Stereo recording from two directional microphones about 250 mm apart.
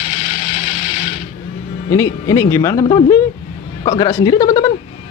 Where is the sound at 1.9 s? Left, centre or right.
Centre.